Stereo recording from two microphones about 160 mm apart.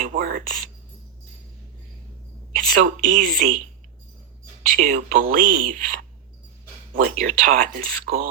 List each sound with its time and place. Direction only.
0.0 s speech: 60° right (ahead or behind)
2.5 s a woman's voice: 55° right (ahead or behind)
4.8 s speech: 60° right (ahead or behind)